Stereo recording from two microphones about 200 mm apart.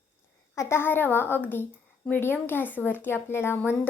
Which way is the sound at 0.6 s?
15° left (ahead or behind).